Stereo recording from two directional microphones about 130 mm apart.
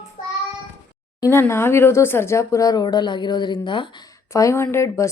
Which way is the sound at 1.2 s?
20° left (ahead or behind).